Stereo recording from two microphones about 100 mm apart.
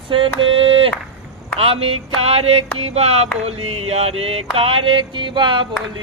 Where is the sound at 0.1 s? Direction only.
60° right (ahead or behind).